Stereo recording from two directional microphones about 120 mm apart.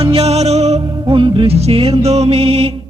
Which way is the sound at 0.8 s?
45° right (ahead or behind).